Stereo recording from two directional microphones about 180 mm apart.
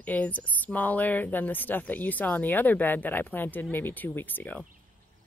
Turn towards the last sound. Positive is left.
turn(degrees=10)  # may be behind; listen again after turning